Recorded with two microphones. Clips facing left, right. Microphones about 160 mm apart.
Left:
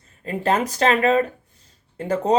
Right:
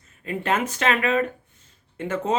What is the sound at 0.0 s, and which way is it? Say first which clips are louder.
Speech: left 5 dB; 35° left (ahead or behind).